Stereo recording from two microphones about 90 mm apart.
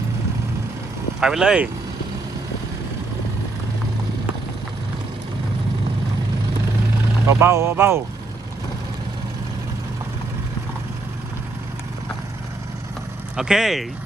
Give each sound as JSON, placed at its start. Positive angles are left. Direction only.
{"t": 1.2, "sound": "speech", "side_deg": -5}
{"t": 7.3, "sound": "speech", "side_deg": -30}
{"t": 13.3, "sound": "speech", "side_deg": -5}